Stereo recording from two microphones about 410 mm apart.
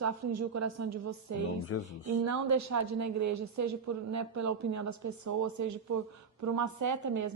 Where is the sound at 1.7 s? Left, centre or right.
Left.